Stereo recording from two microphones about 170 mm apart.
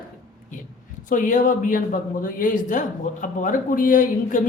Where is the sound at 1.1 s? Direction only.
50° left (ahead or behind).